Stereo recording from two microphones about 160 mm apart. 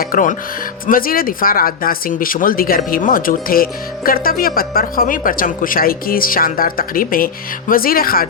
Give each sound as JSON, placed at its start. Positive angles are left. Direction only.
{"t": 0.0, "sound": "speech", "side_deg": 60}